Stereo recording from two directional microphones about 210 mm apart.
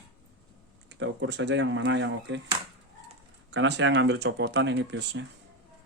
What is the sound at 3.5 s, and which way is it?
Speech, 60° right (ahead or behind).